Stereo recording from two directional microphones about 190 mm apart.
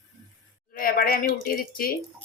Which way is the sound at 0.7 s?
50° left (ahead or behind).